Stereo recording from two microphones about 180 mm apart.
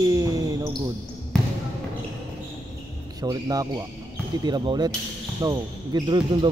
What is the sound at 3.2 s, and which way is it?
Speech, 20° right (ahead or behind).